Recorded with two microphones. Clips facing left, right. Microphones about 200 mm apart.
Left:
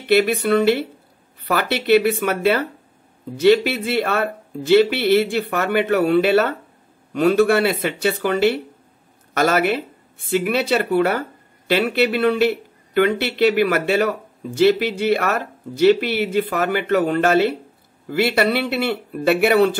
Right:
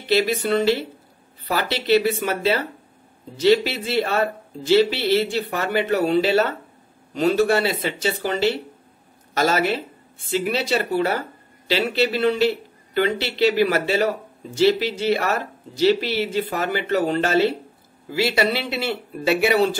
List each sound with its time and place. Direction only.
0.0 s speech: 55° left (ahead or behind)